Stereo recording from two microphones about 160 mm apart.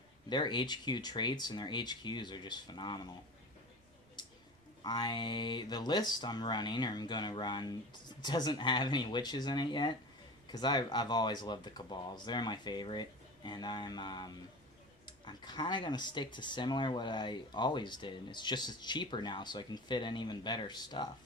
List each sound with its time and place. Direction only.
0.3 s speech: 30° left (ahead or behind)
4.8 s speech: 25° left (ahead or behind)